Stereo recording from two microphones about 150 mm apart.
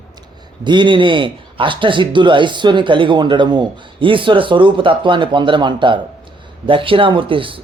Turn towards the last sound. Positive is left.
turn(degrees=-35)  # may be behind; listen again after turning